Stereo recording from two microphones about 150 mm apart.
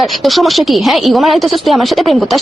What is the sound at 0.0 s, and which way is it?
A woman's voice, centre (ahead or behind).